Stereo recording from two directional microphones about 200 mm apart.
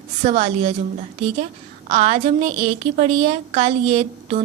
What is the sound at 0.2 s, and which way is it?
Speech, 30° right (ahead or behind).